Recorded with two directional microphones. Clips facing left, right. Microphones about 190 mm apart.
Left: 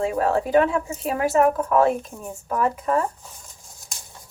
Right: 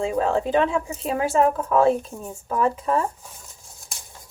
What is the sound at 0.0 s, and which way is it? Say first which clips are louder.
A woman's voice: even; 25° right (ahead or behind).